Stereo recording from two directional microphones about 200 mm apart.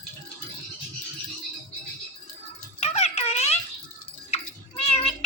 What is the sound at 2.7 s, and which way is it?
Music, 30° left (ahead or behind).